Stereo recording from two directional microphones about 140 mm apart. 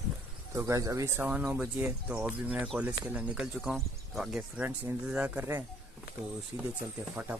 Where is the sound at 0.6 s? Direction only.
20° right (ahead or behind).